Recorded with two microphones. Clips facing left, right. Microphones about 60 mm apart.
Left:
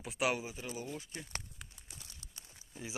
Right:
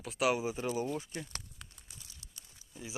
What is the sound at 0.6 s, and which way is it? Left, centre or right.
Speech, right.